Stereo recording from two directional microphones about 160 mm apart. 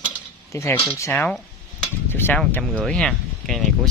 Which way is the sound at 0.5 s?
20° left (ahead or behind).